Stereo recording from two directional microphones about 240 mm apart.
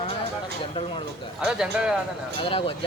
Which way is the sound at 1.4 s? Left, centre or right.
Centre.